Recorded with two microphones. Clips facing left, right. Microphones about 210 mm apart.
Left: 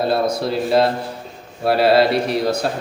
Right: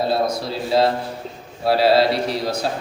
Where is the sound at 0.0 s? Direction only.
55° left (ahead or behind).